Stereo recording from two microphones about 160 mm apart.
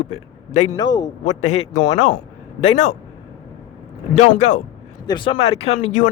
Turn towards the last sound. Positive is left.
turn(degrees=50)  # may be behind; listen again after turning